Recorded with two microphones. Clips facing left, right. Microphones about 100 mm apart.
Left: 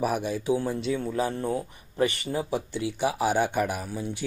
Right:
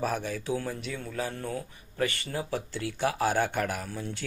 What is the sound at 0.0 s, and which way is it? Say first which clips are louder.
Speech: left 4 dB; 15° left (ahead or behind).